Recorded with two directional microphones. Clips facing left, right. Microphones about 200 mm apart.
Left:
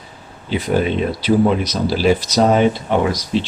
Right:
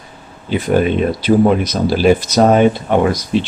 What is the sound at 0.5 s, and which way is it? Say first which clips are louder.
Speech: right 3 dB; 50° right (ahead or behind).